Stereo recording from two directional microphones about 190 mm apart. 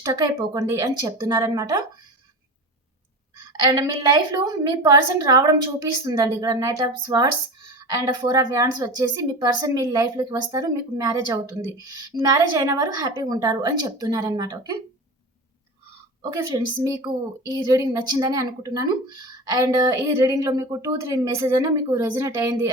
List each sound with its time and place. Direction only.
0.0 s speech: 20° right (ahead or behind)
3.7 s speech: 15° right (ahead or behind)
16.2 s a woman's voice: 15° right (ahead or behind)